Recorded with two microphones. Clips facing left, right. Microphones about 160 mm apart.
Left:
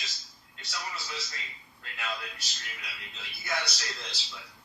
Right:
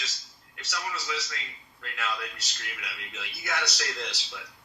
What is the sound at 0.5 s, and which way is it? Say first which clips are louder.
A man's voice: right 4 dB; 75° right (ahead or behind).